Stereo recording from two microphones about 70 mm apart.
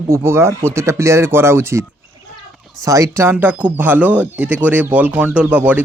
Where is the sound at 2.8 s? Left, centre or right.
Right.